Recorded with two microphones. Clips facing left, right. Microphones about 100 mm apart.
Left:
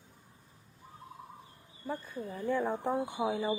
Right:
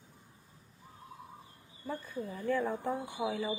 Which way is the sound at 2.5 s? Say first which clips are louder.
Left 2 dB; 20° left (ahead or behind).